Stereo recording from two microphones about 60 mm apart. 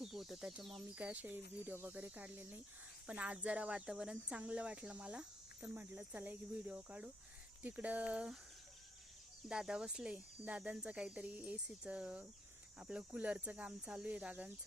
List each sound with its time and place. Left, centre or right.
0.0 s chicken: centre
0.6 s speech: centre
0.9 s speech: right
5.7 s speech: right
9.5 s speech: centre